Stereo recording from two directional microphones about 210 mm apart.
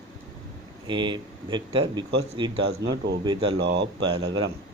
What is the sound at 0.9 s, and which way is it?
Speech, 20° right (ahead or behind).